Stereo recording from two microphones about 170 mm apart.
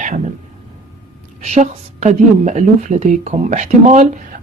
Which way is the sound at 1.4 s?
40° right (ahead or behind).